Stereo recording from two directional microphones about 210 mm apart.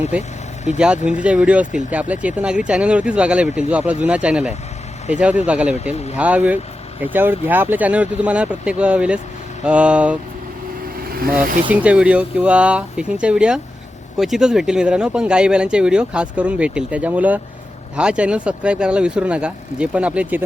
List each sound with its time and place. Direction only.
0.2 s vehicle: 35° left (ahead or behind)
0.8 s speech: 5° right (ahead or behind)
5.8 s speech: 30° left (ahead or behind)
6.1 s speech: 5° right (ahead or behind)
11.0 s vehicle: 45° right (ahead or behind)
11.7 s speech: 5° right (ahead or behind)